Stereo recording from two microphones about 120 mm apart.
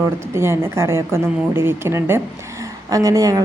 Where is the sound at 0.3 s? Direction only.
20° right (ahead or behind).